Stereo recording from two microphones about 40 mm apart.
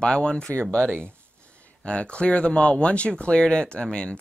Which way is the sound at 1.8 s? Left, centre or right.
Left.